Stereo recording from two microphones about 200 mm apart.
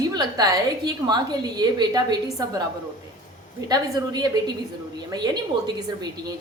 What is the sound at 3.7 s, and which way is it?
A woman's voice, 20° right (ahead or behind).